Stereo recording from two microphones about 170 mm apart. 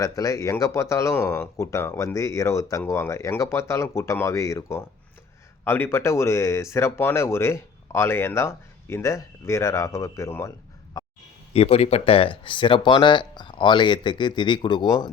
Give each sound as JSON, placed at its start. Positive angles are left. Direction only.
{"t": 0.0, "sound": "speech", "side_deg": 20}
{"t": 11.0, "sound": "a sound", "side_deg": 20}
{"t": 11.5, "sound": "speech", "side_deg": 40}